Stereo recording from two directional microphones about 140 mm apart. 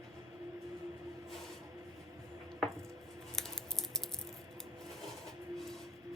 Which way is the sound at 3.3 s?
5° left (ahead or behind).